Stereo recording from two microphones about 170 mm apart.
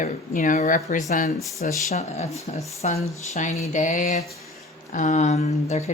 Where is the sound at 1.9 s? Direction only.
40° left (ahead or behind).